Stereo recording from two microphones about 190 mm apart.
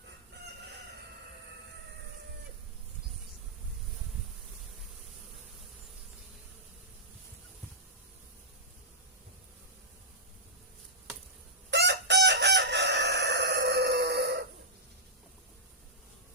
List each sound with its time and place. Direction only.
11.7 s chicken: 65° right (ahead or behind)